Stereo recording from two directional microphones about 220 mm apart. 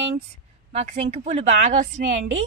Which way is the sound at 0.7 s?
30° right (ahead or behind).